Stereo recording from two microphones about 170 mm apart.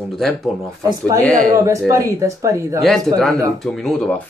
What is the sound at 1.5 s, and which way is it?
Speech, 20° right (ahead or behind).